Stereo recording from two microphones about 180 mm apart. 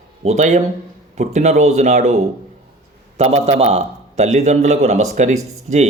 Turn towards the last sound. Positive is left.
turn(degrees=-40)  # may be behind; listen again after turning